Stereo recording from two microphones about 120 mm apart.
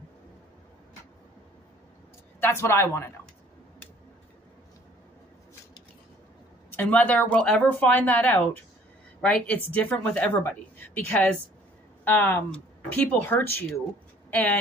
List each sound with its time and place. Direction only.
2.4 s speech: 20° left (ahead or behind)
6.7 s a woman's voice: 15° left (ahead or behind)